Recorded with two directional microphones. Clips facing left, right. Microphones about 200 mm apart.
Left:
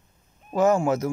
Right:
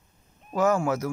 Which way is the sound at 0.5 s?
25° left (ahead or behind).